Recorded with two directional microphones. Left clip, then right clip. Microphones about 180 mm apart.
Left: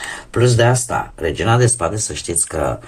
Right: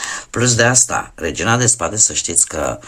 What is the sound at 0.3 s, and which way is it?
Speech, 30° right (ahead or behind).